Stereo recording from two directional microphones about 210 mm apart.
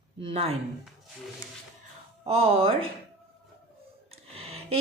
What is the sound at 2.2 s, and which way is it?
Speech, 30° right (ahead or behind).